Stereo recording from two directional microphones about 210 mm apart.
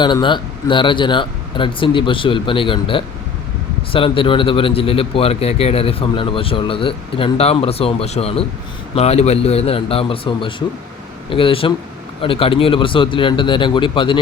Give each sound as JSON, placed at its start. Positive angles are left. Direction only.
{"t": 0.0, "sound": "a man's voice", "side_deg": 20}